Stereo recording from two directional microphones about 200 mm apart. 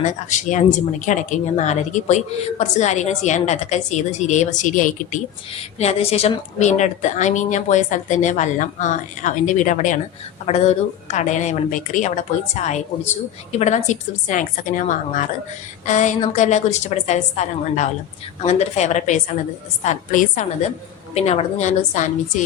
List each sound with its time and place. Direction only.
0.0 s speech: 40° left (ahead or behind)